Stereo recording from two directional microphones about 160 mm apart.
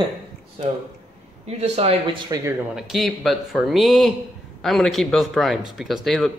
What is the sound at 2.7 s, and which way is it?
Speech, centre (ahead or behind).